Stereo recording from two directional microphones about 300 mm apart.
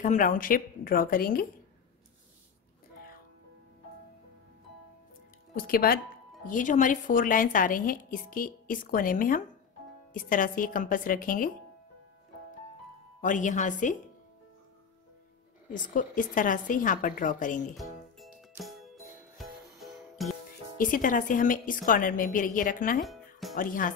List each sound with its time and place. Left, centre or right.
0.0 s a woman's voice: left
5.5 s a woman's voice: left
13.2 s a woman's voice: left
15.7 s a woman's voice: left
17.7 s music: centre
20.7 s a woman's voice: left